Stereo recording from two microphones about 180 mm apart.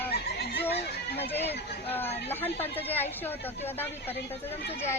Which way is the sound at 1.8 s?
10° left (ahead or behind).